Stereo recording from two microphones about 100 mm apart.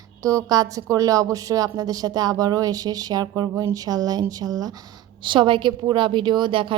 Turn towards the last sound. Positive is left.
turn(degrees=-60)  # may be behind; listen again after turning